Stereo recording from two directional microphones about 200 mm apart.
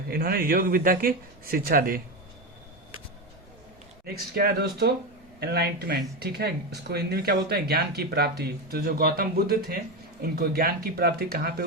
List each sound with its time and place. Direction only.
0.1 s speech: 50° right (ahead or behind)
4.0 s speech: 50° right (ahead or behind)